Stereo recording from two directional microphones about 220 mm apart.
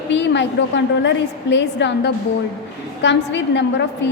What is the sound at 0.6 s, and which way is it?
A woman's voice, 50° left (ahead or behind).